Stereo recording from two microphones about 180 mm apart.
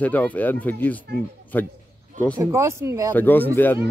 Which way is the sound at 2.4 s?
15° right (ahead or behind).